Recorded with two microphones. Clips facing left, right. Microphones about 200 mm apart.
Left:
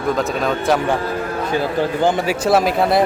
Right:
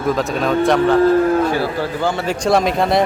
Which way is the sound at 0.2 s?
Centre (ahead or behind).